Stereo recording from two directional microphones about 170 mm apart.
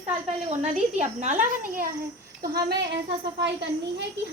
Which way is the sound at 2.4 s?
65° right (ahead or behind).